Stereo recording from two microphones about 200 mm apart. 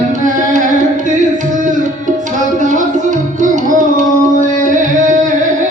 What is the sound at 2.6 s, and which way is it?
Tabla, 40° right (ahead or behind).